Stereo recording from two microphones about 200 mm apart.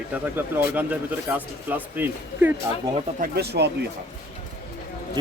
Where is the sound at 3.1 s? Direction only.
50° right (ahead or behind).